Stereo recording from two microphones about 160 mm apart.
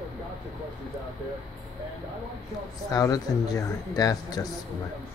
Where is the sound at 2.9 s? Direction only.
20° left (ahead or behind).